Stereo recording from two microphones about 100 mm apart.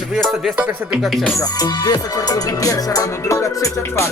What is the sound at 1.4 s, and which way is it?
Music, 40° left (ahead or behind).